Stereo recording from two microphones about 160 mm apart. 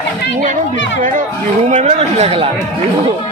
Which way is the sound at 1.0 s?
55° right (ahead or behind).